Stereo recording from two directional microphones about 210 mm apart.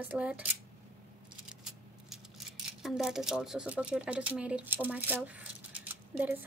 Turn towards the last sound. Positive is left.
turn(degrees=-10)  # may be behind; listen again after turning